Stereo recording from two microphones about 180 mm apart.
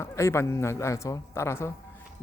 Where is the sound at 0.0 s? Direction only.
15° left (ahead or behind).